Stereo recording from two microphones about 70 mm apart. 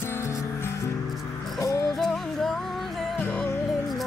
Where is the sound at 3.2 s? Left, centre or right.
Centre.